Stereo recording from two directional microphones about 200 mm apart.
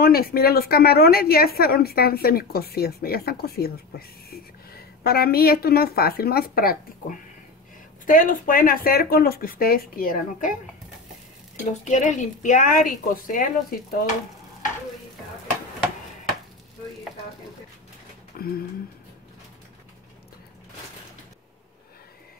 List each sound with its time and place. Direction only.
0.0 s a woman's voice: 50° left (ahead or behind)
11.8 s a woman's voice: 35° left (ahead or behind)
18.3 s a sound: 45° left (ahead or behind)